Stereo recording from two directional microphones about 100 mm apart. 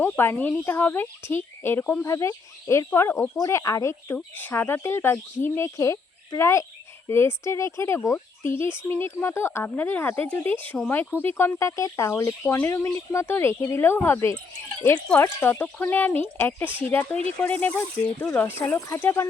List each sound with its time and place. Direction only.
0.0 s speech: 20° left (ahead or behind)